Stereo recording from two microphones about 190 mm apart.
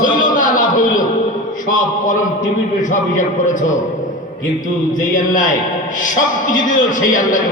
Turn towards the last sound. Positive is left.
turn(degrees=45)  # may be behind; listen again after turning